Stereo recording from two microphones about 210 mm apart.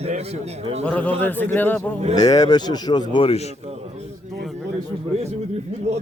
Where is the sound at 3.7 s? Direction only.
30° right (ahead or behind).